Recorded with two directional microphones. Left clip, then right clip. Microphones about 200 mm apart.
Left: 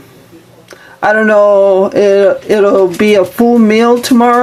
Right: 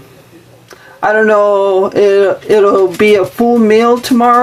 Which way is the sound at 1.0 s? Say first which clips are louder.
Left 1 dB; 15° left (ahead or behind).